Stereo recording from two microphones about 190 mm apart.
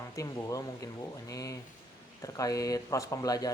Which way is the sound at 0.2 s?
20° left (ahead or behind).